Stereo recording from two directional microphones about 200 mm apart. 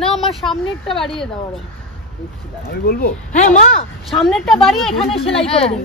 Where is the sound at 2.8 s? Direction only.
50° left (ahead or behind).